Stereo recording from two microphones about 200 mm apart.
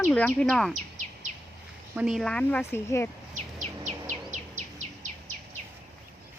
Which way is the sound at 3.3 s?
35° right (ahead or behind).